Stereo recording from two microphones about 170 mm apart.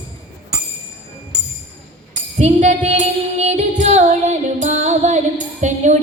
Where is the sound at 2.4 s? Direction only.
40° right (ahead or behind).